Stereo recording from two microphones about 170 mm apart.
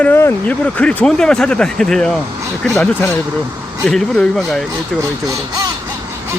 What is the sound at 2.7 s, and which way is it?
Speech, 15° left (ahead or behind).